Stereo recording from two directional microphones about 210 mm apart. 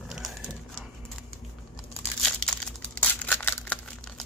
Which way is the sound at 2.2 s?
5° left (ahead or behind).